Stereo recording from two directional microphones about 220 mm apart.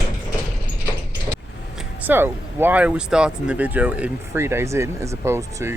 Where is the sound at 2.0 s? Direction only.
10° right (ahead or behind).